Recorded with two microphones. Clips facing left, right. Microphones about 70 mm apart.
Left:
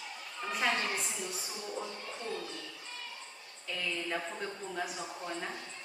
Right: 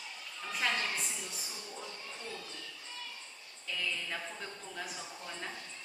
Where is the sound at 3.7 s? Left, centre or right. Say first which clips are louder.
Left 3 dB; centre.